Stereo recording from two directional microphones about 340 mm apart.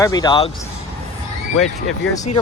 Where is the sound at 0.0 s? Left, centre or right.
Centre.